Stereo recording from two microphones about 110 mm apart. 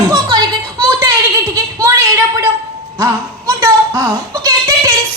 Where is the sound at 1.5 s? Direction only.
30° right (ahead or behind).